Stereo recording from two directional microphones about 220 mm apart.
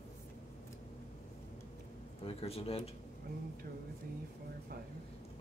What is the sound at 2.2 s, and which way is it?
Speech, 25° left (ahead or behind).